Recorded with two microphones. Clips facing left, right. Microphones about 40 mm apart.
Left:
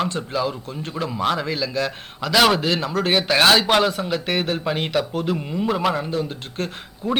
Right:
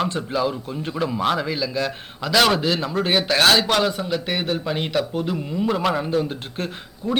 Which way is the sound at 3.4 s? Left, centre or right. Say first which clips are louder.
Left 2 dB; centre.